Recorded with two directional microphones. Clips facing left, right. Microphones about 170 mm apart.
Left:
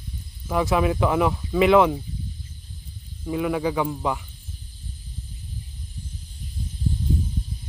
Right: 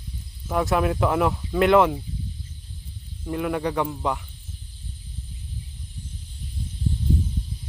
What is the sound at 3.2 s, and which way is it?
Speech, centre (ahead or behind).